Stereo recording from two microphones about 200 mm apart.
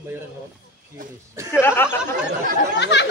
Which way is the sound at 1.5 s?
10° left (ahead or behind).